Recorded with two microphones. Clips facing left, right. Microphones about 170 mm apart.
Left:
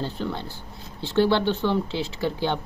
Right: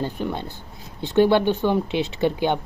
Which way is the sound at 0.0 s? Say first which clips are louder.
Right 3 dB; 15° right (ahead or behind).